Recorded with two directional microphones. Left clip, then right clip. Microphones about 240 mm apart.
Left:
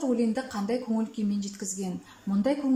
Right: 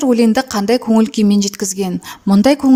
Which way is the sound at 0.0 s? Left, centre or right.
Right.